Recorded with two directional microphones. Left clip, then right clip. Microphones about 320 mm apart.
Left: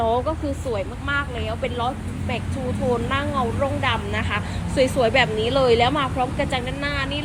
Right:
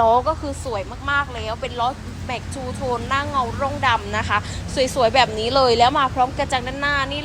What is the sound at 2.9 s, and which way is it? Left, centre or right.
Speech, centre.